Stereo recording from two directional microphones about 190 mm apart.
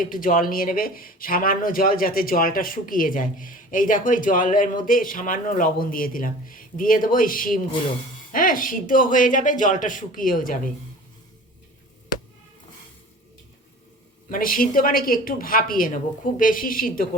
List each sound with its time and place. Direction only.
0.0 s speech: 45° left (ahead or behind)
14.3 s speech: 45° left (ahead or behind)